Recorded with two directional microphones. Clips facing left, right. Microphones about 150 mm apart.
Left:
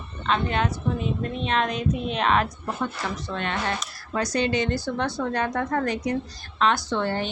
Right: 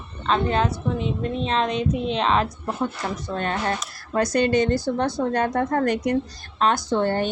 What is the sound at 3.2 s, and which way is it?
Speech, 40° right (ahead or behind).